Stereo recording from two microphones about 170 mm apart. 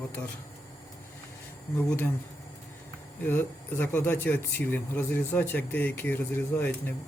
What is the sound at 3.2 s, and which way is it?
Speech, 10° left (ahead or behind).